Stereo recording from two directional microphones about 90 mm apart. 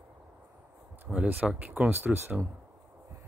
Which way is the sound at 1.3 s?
15° right (ahead or behind).